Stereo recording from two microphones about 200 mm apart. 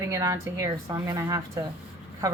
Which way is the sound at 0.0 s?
15° right (ahead or behind).